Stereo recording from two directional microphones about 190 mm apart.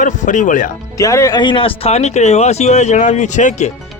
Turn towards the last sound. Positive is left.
turn(degrees=40)  # may be behind; listen again after turning